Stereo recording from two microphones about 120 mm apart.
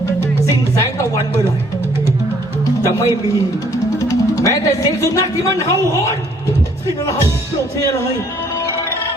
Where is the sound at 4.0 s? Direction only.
25° left (ahead or behind).